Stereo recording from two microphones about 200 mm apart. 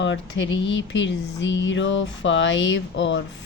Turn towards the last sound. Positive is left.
turn(degrees=65)  # may be behind; listen again after turning